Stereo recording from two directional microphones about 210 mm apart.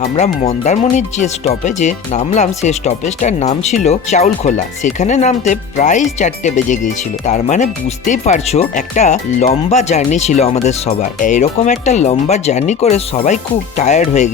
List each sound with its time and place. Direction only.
0.2 s speech: 35° left (ahead or behind)